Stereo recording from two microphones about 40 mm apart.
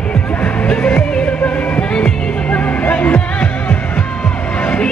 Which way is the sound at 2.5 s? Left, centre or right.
Left.